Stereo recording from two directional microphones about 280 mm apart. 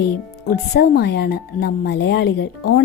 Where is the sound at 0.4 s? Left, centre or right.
Left.